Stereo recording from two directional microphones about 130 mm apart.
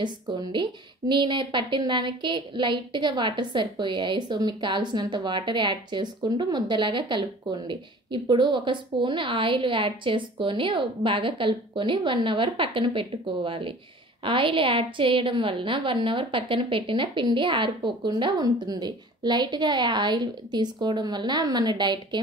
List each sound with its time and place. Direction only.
0.0 s a woman's voice: 35° right (ahead or behind)